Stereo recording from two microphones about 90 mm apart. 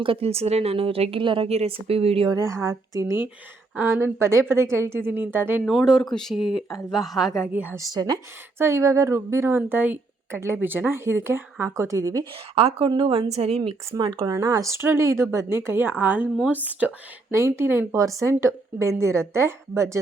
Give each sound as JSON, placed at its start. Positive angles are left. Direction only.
{"t": 0.0, "sound": "a woman's voice", "side_deg": -90}
{"t": 2.3, "sound": "a woman's voice", "side_deg": -35}
{"t": 3.8, "sound": "a woman's voice", "side_deg": -25}
{"t": 5.6, "sound": "speech", "side_deg": -5}
{"t": 7.4, "sound": "a woman's voice", "side_deg": -20}
{"t": 7.8, "sound": "speech", "side_deg": -45}
{"t": 8.5, "sound": "a woman's voice", "side_deg": -30}
{"t": 12.5, "sound": "a woman's voice", "side_deg": -90}
{"t": 13.9, "sound": "speech", "side_deg": -50}
{"t": 14.7, "sound": "a woman's voice", "side_deg": -30}
{"t": 17.3, "sound": "a woman's voice", "side_deg": -30}
{"t": 17.9, "sound": "a woman's voice", "side_deg": -35}